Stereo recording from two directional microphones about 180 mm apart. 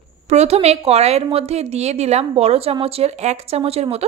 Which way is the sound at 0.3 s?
35° right (ahead or behind).